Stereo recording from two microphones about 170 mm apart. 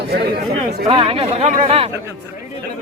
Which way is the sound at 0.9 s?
35° right (ahead or behind).